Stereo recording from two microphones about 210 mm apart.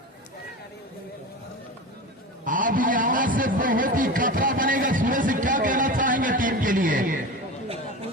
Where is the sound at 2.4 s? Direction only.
40° right (ahead or behind).